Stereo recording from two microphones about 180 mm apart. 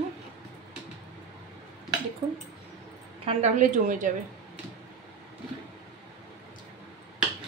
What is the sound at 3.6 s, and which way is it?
Speech, 45° right (ahead or behind).